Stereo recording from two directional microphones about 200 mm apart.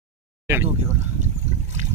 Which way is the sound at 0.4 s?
10° right (ahead or behind).